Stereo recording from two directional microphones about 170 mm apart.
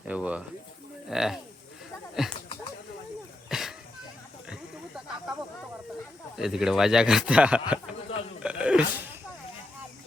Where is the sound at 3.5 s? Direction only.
Centre (ahead or behind).